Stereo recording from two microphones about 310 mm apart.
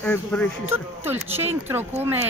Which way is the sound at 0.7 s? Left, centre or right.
Centre.